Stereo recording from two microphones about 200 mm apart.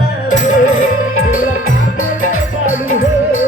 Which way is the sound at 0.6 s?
90° left.